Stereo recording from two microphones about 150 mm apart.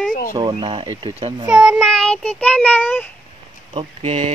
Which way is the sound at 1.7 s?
5° left (ahead or behind).